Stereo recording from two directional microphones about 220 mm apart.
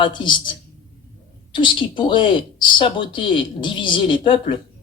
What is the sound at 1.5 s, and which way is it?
Speech, 20° left (ahead or behind).